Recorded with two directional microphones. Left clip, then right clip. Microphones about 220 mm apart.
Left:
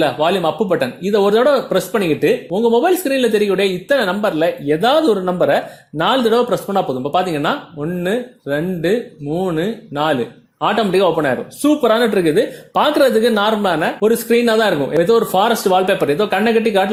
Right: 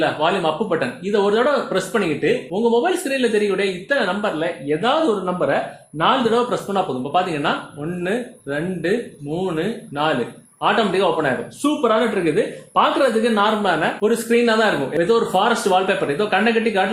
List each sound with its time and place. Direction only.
0.0 s speech: 35° left (ahead or behind)